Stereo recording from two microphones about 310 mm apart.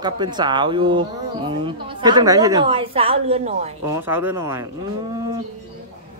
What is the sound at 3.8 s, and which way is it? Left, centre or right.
Speech, centre.